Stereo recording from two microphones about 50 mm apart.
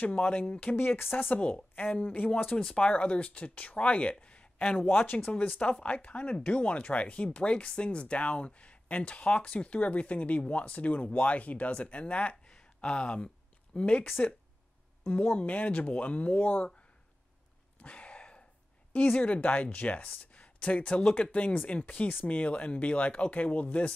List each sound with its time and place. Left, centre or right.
0.0 s speech: left
1.3 s speech: left
2.5 s speech: centre
5.0 s speech: left
5.3 s speech: left
15.3 s speech: left
17.8 s a sound: left
18.9 s speech: left